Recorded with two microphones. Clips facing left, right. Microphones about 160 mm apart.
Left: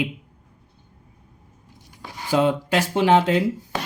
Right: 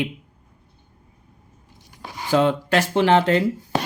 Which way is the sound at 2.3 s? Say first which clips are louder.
Right 1 dB; 10° left (ahead or behind).